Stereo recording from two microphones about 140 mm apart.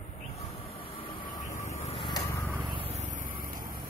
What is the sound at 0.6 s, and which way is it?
Train, 40° left (ahead or behind).